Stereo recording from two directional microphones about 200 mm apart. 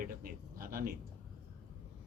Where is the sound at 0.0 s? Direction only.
45° right (ahead or behind).